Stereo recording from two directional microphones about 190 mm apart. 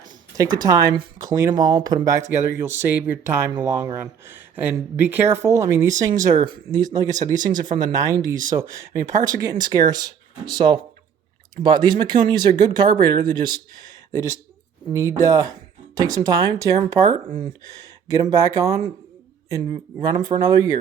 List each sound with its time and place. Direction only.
0.0 s speech: 20° right (ahead or behind)
18.1 s speech: 20° right (ahead or behind)